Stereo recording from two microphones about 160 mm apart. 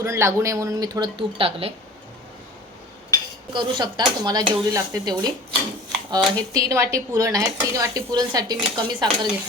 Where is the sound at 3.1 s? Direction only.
20° left (ahead or behind).